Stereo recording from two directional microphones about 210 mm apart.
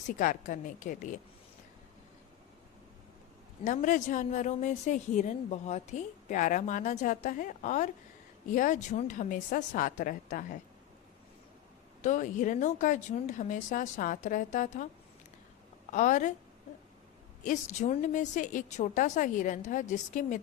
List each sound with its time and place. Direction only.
0.1 s a woman's voice: 40° left (ahead or behind)
3.6 s a woman's voice: 35° left (ahead or behind)
12.0 s a woman's voice: 35° left (ahead or behind)
15.9 s a woman's voice: 35° left (ahead or behind)
17.4 s a woman's voice: 35° left (ahead or behind)